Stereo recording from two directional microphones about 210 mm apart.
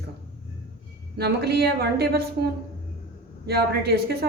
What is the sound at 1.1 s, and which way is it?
A woman's voice, 50° right (ahead or behind).